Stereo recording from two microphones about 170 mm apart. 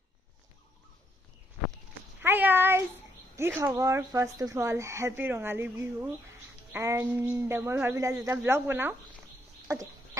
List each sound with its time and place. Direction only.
2.2 s a sound: 10° right (ahead or behind)
3.3 s speech: 15° right (ahead or behind)
9.7 s chicken: 20° right (ahead or behind)